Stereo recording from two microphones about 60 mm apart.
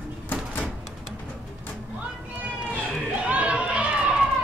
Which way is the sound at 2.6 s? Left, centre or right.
Right.